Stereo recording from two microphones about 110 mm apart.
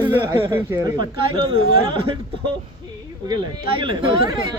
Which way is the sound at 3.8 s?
45° right (ahead or behind).